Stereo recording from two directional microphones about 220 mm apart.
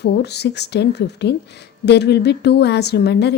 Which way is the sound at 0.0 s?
50° left (ahead or behind).